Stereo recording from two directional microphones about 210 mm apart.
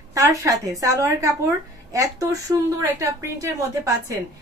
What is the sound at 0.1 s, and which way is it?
A woman's voice, 15° right (ahead or behind).